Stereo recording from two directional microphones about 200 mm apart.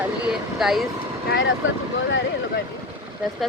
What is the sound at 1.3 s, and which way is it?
Speech, 75° left (ahead or behind).